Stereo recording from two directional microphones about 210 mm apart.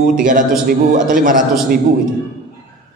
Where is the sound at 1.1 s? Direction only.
40° right (ahead or behind).